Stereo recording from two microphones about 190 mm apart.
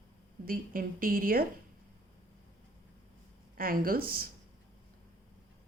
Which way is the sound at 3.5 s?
50° right (ahead or behind).